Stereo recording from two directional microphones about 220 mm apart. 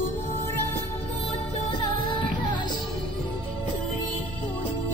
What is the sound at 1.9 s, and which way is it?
Music, 20° left (ahead or behind).